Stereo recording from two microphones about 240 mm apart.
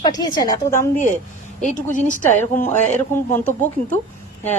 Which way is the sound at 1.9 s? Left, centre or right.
Left.